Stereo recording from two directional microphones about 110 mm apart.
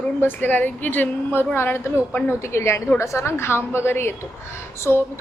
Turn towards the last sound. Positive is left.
turn(degrees=20)  # may be behind; listen again after turning